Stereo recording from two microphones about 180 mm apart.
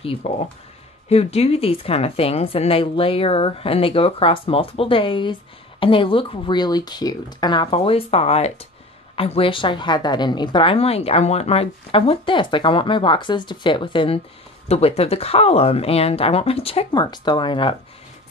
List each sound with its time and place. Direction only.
0.0 s a woman's voice: 30° left (ahead or behind)